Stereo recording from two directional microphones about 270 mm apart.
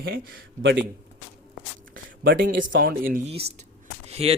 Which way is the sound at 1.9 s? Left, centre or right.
Right.